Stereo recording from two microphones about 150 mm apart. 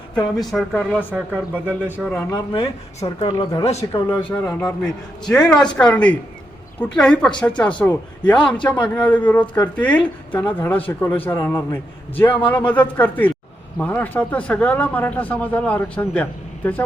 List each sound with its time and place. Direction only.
0.3 s speech: centre (ahead or behind)
1.1 s speech: 10° right (ahead or behind)
2.3 s speech: 30° left (ahead or behind)
3.8 s speech: 20° left (ahead or behind)